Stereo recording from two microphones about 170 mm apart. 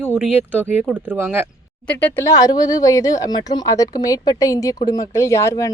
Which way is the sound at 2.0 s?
15° left (ahead or behind).